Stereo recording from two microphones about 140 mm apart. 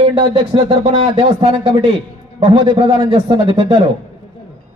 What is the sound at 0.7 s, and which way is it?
A man's voice, 45° right (ahead or behind).